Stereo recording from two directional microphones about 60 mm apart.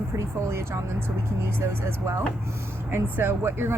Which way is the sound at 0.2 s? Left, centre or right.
Right.